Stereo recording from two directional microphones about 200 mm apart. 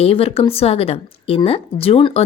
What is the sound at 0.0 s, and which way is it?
Speech, 30° left (ahead or behind).